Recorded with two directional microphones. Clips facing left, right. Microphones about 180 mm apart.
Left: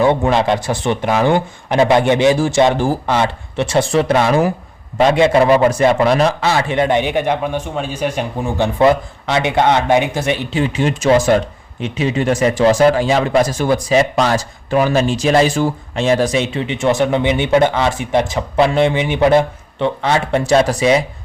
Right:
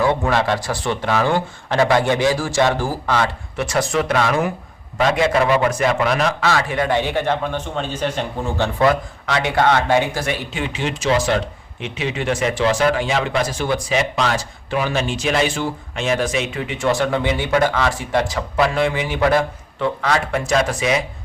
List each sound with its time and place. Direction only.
0.0 s a man's voice: 20° left (ahead or behind)
10.6 s speech: 45° left (ahead or behind)